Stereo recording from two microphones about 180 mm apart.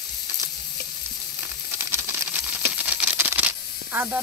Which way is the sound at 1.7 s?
10° right (ahead or behind).